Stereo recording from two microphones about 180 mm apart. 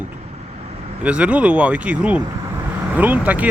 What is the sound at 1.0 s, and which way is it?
Speech, 5° right (ahead or behind).